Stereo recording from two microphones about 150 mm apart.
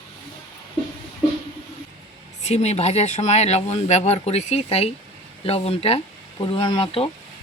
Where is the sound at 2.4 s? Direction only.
45° left (ahead or behind).